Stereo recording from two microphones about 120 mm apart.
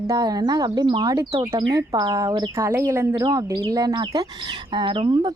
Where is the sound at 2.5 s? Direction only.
20° right (ahead or behind).